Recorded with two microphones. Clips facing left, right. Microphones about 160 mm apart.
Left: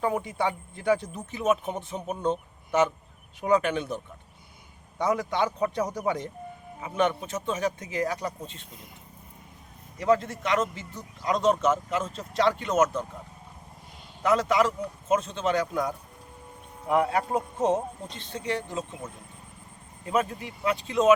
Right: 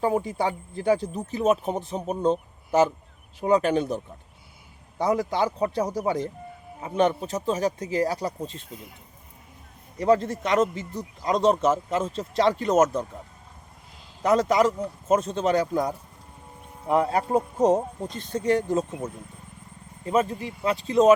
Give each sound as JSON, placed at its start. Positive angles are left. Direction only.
{"t": 0.0, "sound": "a man's voice", "side_deg": -35}
{"t": 10.0, "sound": "a man's voice", "side_deg": -35}
{"t": 14.2, "sound": "a man's voice", "side_deg": -35}
{"t": 17.0, "sound": "a man's voice", "side_deg": -35}
{"t": 20.1, "sound": "a man's voice", "side_deg": -30}